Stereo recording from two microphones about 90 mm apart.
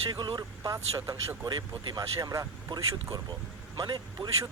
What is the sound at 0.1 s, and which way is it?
Speech, 55° right (ahead or behind).